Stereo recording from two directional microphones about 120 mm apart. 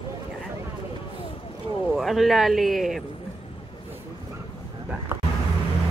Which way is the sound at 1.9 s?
Centre (ahead or behind).